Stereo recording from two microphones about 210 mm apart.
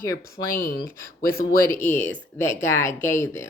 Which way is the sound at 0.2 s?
45° left (ahead or behind).